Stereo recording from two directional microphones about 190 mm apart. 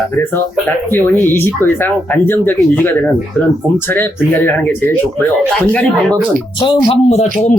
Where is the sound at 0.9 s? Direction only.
10° left (ahead or behind).